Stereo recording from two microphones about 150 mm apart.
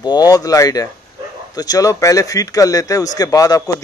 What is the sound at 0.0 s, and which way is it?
A man's voice, 25° left (ahead or behind).